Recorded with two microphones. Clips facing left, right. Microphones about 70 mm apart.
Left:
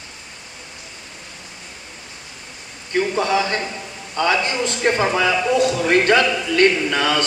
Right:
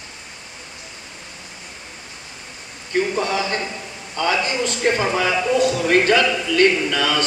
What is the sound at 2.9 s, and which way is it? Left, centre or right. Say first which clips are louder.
A man's voice: left 2 dB; left.